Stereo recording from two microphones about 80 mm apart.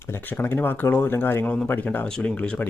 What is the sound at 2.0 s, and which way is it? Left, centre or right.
Speech, centre.